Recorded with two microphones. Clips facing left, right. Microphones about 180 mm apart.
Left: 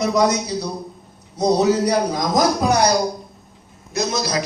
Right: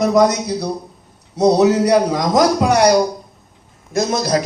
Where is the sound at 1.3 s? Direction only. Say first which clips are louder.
Right 4 dB; 75° right (ahead or behind).